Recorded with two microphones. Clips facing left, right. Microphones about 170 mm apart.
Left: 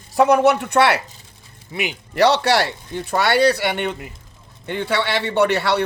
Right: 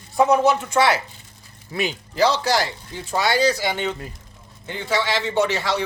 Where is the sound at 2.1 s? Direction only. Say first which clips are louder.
Left 4 dB; 65° left (ahead or behind).